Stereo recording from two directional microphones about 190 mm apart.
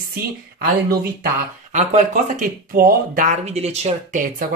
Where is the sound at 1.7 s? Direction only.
40° right (ahead or behind).